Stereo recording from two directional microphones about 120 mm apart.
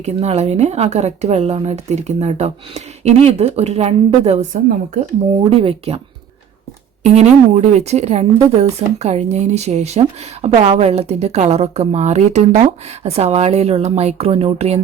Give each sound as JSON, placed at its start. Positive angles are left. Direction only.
{"t": 0.0, "sound": "a woman's voice", "side_deg": -65}
{"t": 5.3, "sound": "speech", "side_deg": -50}
{"t": 7.0, "sound": "a woman's voice", "side_deg": -70}